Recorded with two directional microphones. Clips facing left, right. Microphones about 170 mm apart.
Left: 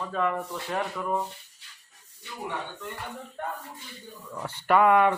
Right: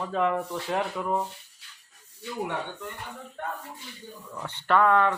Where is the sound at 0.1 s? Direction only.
20° right (ahead or behind).